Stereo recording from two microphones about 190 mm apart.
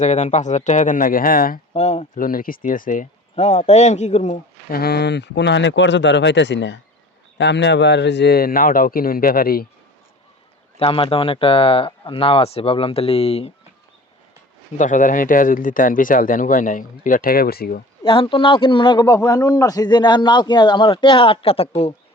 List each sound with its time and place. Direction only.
0.0 s speech: 40° left (ahead or behind)
1.7 s speech: 35° left (ahead or behind)
4.7 s speech: 55° left (ahead or behind)
10.8 s a man's voice: 30° left (ahead or behind)
14.8 s speech: 40° left (ahead or behind)
18.0 s a man's voice: 25° left (ahead or behind)